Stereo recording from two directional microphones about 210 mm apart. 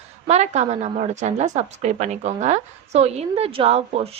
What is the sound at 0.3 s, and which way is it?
A woman's voice, 30° right (ahead or behind).